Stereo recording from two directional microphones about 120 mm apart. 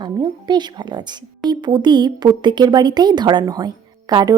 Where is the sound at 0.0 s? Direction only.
35° right (ahead or behind).